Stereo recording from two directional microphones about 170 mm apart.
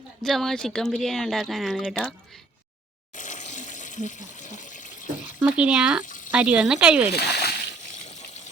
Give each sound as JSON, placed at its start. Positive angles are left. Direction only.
{"t": 0.2, "sound": "speech", "side_deg": 0}
{"t": 3.2, "sound": "water", "side_deg": 45}
{"t": 5.4, "sound": "speech", "side_deg": -5}
{"t": 6.1, "sound": "a sound", "side_deg": 50}
{"t": 6.3, "sound": "speech", "side_deg": -5}
{"t": 7.2, "sound": "speech", "side_deg": 70}